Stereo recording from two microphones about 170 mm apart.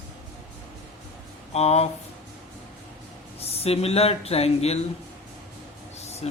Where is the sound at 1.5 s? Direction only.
40° left (ahead or behind).